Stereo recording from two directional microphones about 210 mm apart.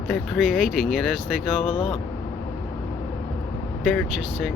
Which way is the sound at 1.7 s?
25° left (ahead or behind).